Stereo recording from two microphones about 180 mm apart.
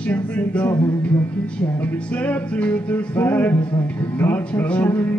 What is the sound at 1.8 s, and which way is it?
Music, 5° left (ahead or behind).